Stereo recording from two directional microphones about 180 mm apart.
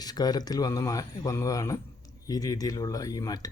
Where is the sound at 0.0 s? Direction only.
20° left (ahead or behind).